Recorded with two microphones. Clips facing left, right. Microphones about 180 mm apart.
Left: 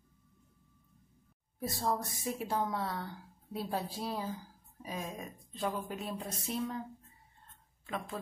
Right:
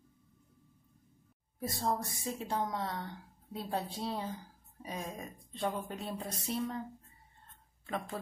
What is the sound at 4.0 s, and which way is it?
Speech, 25° right (ahead or behind).